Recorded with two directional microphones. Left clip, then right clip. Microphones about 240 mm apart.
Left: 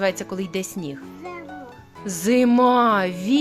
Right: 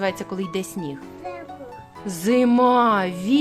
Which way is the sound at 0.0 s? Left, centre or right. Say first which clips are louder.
Left 2 dB; centre.